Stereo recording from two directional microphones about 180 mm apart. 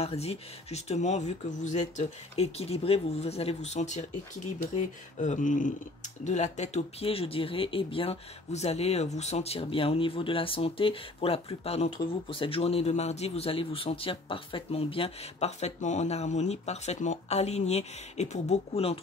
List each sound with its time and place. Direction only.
0.0 s speech: 35° left (ahead or behind)